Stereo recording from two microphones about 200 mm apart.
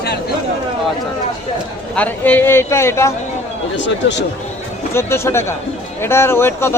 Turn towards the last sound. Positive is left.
turn(degrees=10)  # may be behind; listen again after turning